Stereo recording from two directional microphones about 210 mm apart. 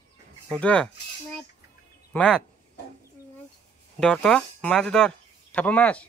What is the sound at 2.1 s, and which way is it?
Speech, centre (ahead or behind).